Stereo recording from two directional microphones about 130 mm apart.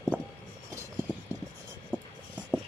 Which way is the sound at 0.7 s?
20° right (ahead or behind).